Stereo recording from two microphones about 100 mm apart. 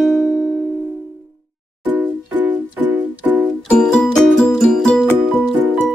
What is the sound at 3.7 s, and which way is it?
Music, 10° left (ahead or behind).